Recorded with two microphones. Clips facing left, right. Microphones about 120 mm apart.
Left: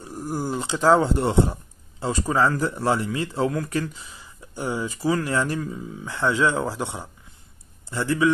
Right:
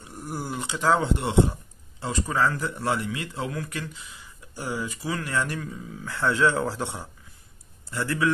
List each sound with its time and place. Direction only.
0.0 s speech: 35° left (ahead or behind)
4.6 s speech: 25° left (ahead or behind)